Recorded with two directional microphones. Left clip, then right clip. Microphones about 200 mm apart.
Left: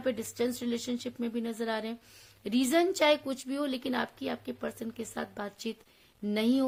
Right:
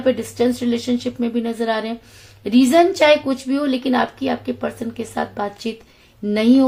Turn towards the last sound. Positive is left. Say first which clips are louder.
# right 14 dB
turn(degrees=50)  # may be behind; listen again after turning